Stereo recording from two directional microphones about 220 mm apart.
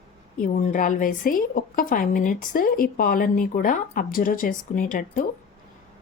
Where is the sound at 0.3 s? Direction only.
40° left (ahead or behind).